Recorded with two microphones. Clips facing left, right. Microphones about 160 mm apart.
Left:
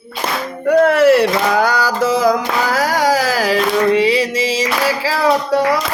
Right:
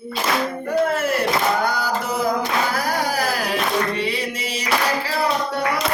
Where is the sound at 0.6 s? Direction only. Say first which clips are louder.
Left 13 dB; 80° left.